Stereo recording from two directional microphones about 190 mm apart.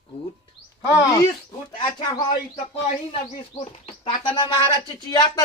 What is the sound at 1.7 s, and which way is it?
Speech, 25° left (ahead or behind).